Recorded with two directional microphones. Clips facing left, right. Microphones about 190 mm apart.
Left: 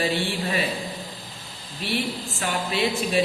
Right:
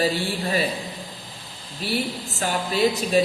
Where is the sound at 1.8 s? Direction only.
40° right (ahead or behind).